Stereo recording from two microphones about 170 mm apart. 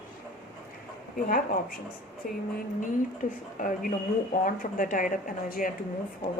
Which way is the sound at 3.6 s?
50° left (ahead or behind).